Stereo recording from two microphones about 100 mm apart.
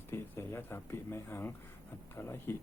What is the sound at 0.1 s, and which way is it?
Speech, 25° left (ahead or behind).